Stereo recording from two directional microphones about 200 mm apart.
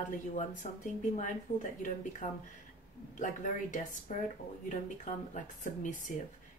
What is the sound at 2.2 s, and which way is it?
Speech, 35° left (ahead or behind).